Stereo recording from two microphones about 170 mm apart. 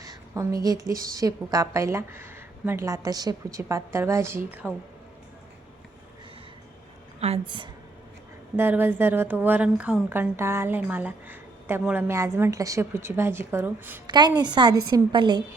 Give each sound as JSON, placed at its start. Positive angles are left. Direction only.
{"t": 0.0, "sound": "a woman's voice", "side_deg": -20}
{"t": 7.2, "sound": "a woman's voice", "side_deg": -35}
{"t": 8.5, "sound": "speech", "side_deg": -10}
{"t": 14.1, "sound": "a woman's voice", "side_deg": -25}